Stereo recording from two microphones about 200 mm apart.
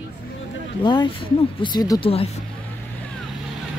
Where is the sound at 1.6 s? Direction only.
20° left (ahead or behind).